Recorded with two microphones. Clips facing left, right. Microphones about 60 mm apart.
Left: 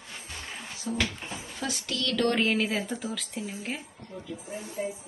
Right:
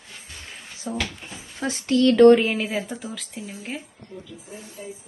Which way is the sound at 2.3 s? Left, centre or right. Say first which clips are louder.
Right 4 dB; centre.